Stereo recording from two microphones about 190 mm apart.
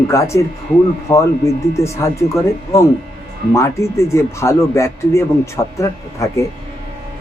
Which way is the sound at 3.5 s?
15° left (ahead or behind).